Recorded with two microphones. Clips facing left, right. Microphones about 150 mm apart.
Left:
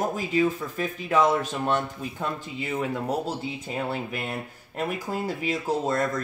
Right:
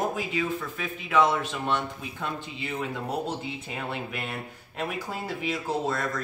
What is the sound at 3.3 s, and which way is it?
Speech, 40° left (ahead or behind).